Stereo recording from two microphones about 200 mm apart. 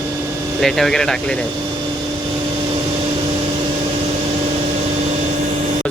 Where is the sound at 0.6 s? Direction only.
Centre (ahead or behind).